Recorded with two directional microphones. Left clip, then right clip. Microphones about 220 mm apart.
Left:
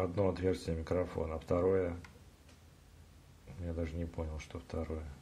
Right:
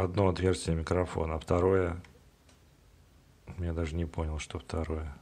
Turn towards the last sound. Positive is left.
turn(degrees=-40)  # may be behind; listen again after turning